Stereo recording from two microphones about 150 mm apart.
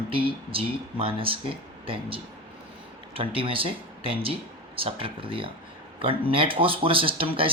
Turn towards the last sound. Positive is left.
turn(degrees=-35)  # may be behind; listen again after turning